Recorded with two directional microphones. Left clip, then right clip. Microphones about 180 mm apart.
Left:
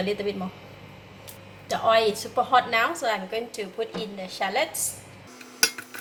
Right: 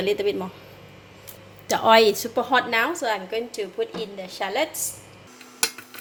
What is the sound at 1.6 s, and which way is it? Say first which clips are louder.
A woman's voice: right 5 dB; 50° right (ahead or behind).